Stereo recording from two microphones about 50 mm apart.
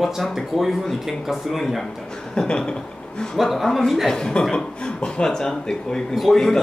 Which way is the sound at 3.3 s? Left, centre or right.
Centre.